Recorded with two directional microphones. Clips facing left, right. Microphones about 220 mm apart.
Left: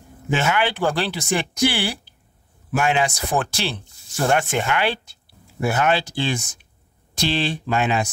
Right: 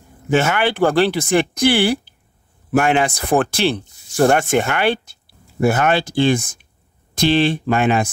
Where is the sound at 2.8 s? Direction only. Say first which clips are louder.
Right 4 dB; 55° right (ahead or behind).